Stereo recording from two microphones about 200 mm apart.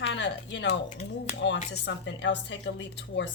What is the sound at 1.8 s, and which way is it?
Speech, 60° left (ahead or behind).